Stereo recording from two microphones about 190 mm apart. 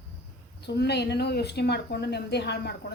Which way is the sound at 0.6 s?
60° left (ahead or behind).